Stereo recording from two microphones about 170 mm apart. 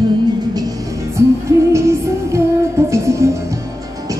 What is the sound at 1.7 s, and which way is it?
Music, 15° right (ahead or behind).